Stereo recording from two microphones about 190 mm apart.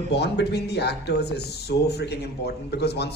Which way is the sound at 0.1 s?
60° left (ahead or behind).